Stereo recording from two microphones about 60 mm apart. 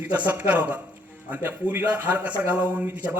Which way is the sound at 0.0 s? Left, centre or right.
Right.